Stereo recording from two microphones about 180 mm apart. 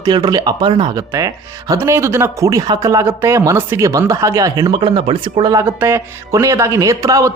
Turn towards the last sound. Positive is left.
turn(degrees=-15)  # may be behind; listen again after turning